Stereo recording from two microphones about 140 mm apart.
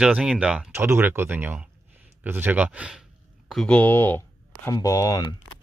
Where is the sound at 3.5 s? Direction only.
5° left (ahead or behind); by 5.2 s 25° left (ahead or behind).